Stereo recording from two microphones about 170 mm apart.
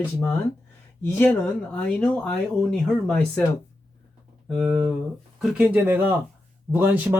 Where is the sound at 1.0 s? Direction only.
10° left (ahead or behind).